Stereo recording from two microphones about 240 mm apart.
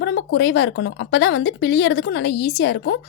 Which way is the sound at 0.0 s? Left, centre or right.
Left.